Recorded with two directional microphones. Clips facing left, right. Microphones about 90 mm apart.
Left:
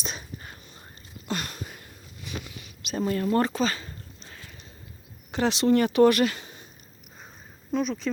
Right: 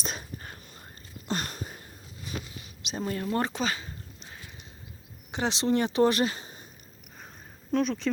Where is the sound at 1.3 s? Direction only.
35° right (ahead or behind).